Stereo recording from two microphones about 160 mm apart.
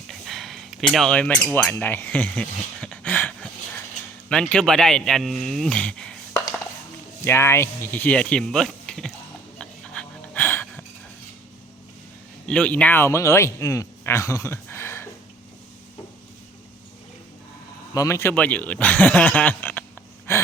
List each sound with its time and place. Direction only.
0.1 s a sound: centre (ahead or behind)
4.3 s speech: 5° left (ahead or behind)
7.3 s speech: 15° left (ahead or behind)
9.6 s a sound: 5° left (ahead or behind)
12.5 s speech: 5° left (ahead or behind)
17.9 s speech: 20° left (ahead or behind)
20.3 s gasp: 15° left (ahead or behind)